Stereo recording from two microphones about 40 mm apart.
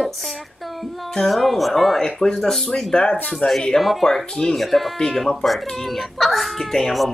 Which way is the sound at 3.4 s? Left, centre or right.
Left.